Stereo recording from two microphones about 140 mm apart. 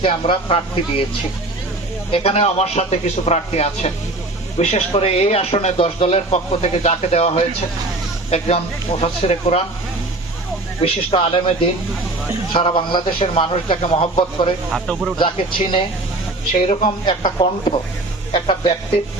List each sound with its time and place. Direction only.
0.0 s a man's voice: 40° left (ahead or behind)
2.0 s speech: 45° left (ahead or behind)
10.8 s speech: 40° left (ahead or behind)
12.5 s a man's voice: 35° left (ahead or behind)
14.7 s speech: centre (ahead or behind)
15.2 s a man's voice: 35° left (ahead or behind)